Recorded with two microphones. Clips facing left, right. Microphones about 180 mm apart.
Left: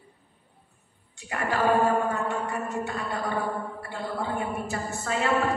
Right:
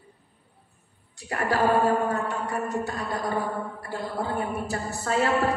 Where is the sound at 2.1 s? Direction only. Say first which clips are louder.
Right 1 dB; 35° right (ahead or behind).